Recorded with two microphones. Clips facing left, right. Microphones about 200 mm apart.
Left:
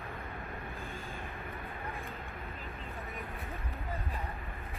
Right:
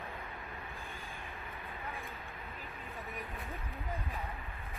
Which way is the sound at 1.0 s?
50° left (ahead or behind).